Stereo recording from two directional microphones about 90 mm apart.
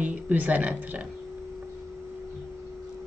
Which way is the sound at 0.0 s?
15° right (ahead or behind).